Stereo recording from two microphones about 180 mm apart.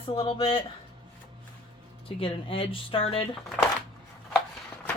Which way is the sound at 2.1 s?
30° left (ahead or behind).